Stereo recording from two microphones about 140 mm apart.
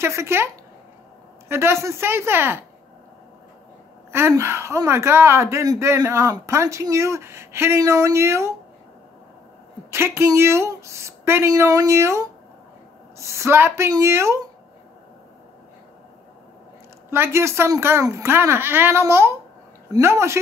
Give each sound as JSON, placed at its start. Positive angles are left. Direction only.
{"t": 0.0, "sound": "speech", "side_deg": -20}
{"t": 1.5, "sound": "speech", "side_deg": -20}
{"t": 4.1, "sound": "speech", "side_deg": -20}
{"t": 9.8, "sound": "speech", "side_deg": -20}
{"t": 17.1, "sound": "speech", "side_deg": -20}